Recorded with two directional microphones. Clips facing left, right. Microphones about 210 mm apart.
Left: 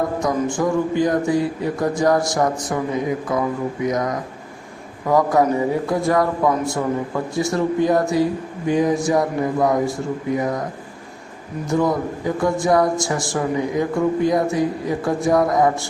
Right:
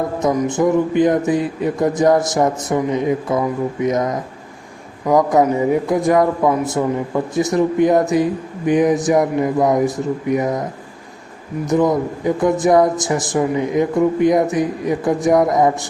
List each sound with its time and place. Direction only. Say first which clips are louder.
0.2 s speech: right 4 dB; 20° right (ahead or behind)
11.6 s speech: right 4 dB; 20° right (ahead or behind)